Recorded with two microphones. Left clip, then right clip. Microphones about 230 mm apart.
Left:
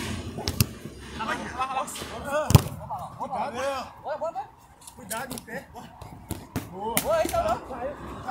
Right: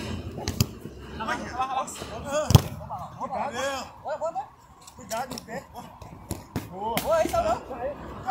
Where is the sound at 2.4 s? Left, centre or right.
Centre.